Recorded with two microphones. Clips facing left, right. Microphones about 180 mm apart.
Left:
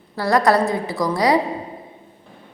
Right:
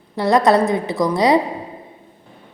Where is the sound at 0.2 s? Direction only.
20° right (ahead or behind).